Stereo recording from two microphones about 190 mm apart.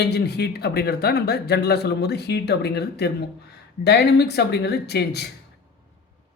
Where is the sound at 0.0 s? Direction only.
60° left (ahead or behind).